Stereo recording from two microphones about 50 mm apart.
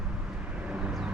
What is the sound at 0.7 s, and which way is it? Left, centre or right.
Vehicle, right.